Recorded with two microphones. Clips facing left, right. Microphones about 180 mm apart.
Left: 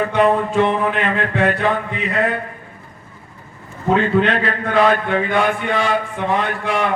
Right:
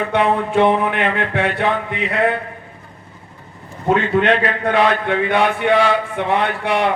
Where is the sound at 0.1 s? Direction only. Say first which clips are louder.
Left 1 dB; 65° right (ahead or behind).